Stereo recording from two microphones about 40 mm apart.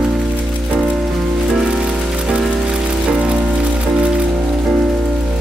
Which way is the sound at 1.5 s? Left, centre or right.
Centre.